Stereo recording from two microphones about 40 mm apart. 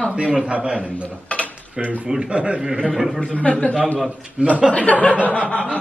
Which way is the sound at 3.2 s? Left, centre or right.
Left.